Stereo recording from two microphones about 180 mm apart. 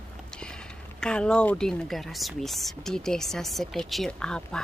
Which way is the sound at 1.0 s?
5° left (ahead or behind).